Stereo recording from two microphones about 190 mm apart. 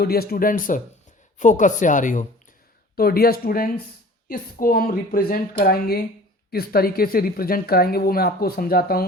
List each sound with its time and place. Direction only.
0.0 s a woman's voice: 55° left (ahead or behind)
2.9 s a woman's voice: 55° left (ahead or behind)